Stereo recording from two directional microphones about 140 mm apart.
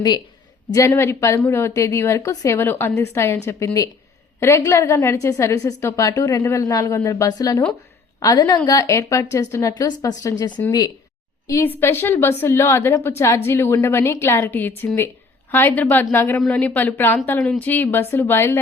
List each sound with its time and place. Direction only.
0.7 s a woman's voice: 20° left (ahead or behind)
11.4 s a woman's voice: 20° left (ahead or behind)